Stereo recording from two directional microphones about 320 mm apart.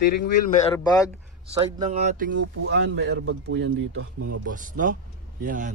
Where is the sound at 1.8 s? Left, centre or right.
Right.